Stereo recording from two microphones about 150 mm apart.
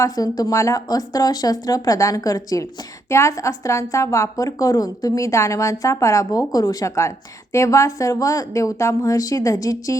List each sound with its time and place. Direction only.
0.0 s a woman's voice: 25° left (ahead or behind)